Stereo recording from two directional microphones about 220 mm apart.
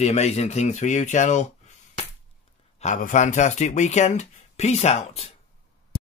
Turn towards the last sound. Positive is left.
turn(degrees=25)  # may be behind; listen again after turning